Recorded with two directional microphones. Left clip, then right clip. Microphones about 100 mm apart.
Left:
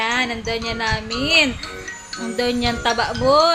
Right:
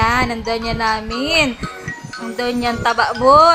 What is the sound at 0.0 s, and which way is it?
A woman's voice, 40° right (ahead or behind).